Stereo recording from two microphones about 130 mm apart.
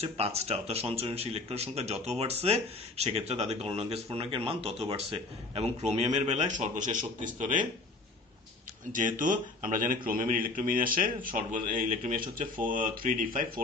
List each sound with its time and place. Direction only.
0.0 s a man's voice: 55° right (ahead or behind); by 7.6 s 90° right
9.2 s speech: 90° right